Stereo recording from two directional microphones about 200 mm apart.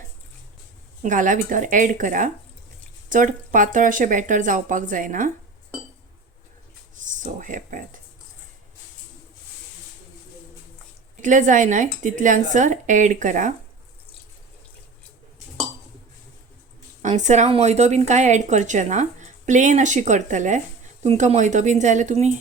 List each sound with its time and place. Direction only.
1.0 s a woman's voice: 40° right (ahead or behind)
7.0 s speech: 40° right (ahead or behind)
11.2 s a woman's voice: 40° right (ahead or behind)
17.0 s a woman's voice: 40° right (ahead or behind)